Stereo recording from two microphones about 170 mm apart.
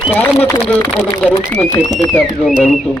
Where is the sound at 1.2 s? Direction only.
10° left (ahead or behind).